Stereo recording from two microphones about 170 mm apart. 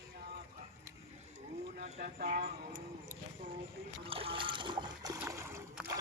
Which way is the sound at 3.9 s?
35° right (ahead or behind).